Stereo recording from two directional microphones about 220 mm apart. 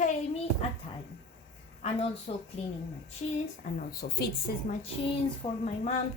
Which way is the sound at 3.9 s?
45° left (ahead or behind).